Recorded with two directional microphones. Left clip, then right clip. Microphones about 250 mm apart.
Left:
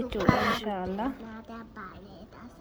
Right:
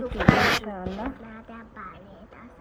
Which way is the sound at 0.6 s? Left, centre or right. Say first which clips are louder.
Left 1 dB; centre.